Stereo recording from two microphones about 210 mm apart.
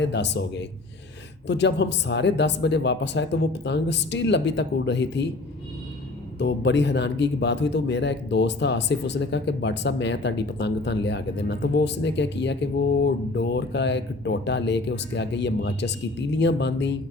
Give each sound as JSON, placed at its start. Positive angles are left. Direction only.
{"t": 0.0, "sound": "a man's voice", "side_deg": 55}
{"t": 6.4, "sound": "a man's voice", "side_deg": 55}